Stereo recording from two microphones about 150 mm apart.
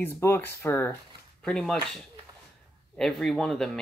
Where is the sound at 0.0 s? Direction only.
15° left (ahead or behind).